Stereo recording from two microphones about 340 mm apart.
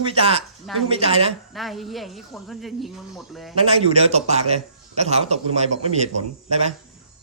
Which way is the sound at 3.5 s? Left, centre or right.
Centre.